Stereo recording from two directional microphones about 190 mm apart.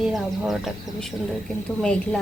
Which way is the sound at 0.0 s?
Centre (ahead or behind).